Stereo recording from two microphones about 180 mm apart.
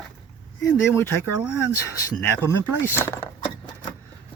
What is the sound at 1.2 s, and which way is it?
Speech, 10° right (ahead or behind).